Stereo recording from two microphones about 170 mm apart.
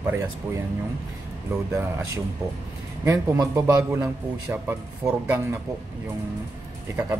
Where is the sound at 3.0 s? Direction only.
20° right (ahead or behind).